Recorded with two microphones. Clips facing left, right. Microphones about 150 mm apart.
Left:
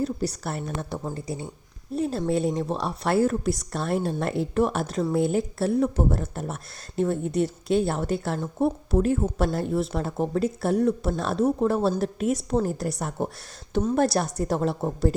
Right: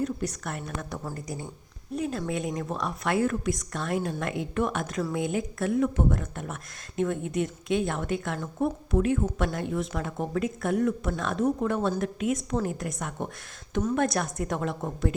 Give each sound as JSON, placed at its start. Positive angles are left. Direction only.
{"t": 0.0, "sound": "speech", "side_deg": 35}